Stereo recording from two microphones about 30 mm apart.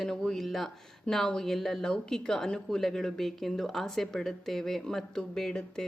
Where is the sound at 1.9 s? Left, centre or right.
Left.